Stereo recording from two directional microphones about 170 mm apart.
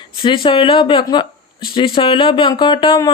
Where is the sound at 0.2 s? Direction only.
30° left (ahead or behind).